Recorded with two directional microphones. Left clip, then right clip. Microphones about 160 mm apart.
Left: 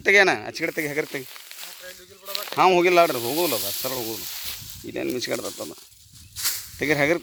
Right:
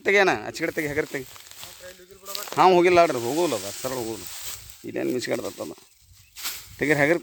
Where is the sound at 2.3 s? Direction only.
15° right (ahead or behind).